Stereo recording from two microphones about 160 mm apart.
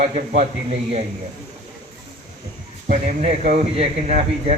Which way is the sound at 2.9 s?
45° right (ahead or behind).